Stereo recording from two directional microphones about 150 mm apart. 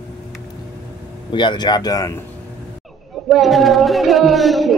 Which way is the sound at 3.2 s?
Centre (ahead or behind).